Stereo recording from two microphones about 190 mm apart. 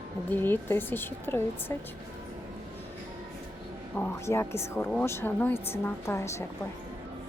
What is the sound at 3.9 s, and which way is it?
Speech, 10° left (ahead or behind).